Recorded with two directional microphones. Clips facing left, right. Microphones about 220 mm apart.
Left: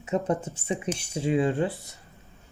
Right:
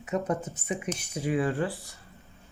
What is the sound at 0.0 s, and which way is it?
Speech, 30° left (ahead or behind).